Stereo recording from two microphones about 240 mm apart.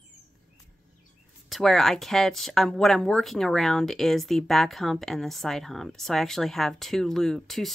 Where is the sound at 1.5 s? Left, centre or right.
Centre.